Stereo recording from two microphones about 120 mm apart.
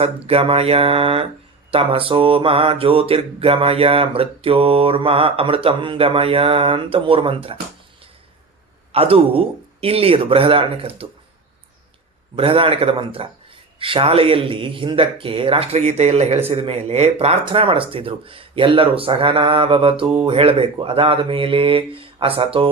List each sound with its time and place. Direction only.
0.0 s mantra: 50° right (ahead or behind)
8.9 s mantra: 55° right (ahead or behind)
12.4 s mantra: 50° right (ahead or behind)